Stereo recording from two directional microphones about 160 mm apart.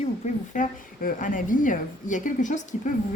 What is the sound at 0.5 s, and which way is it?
A woman's voice, 55° left (ahead or behind).